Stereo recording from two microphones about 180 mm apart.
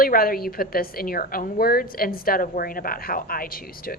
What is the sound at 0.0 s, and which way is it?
A woman's voice, 55° left (ahead or behind).